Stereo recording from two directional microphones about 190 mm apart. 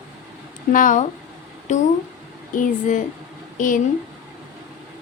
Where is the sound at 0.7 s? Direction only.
45° left (ahead or behind).